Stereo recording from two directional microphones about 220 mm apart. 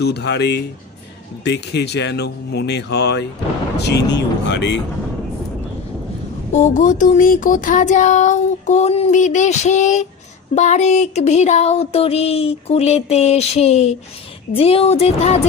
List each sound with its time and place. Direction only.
0.0 s speech: 50° left (ahead or behind)
6.5 s child singing: 35° left (ahead or behind)